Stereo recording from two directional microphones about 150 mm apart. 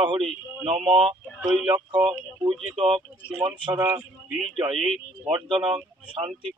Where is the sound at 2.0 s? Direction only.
30° right (ahead or behind).